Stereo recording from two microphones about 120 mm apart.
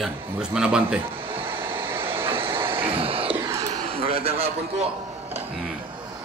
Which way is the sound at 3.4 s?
25° right (ahead or behind).